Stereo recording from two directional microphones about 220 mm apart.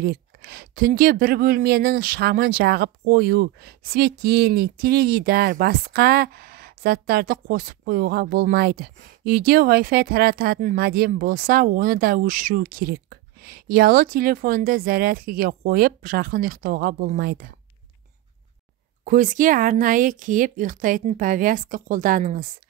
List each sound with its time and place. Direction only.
0.0 s speech: 45° right (ahead or behind)
19.0 s speech: 35° right (ahead or behind)